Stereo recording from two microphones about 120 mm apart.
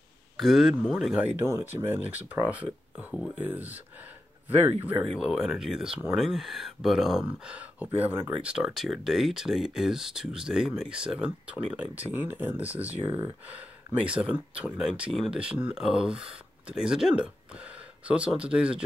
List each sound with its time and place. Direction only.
0.4 s speech: centre (ahead or behind)
1.4 s speech: 20° right (ahead or behind)
5.1 s speech: 5° right (ahead or behind)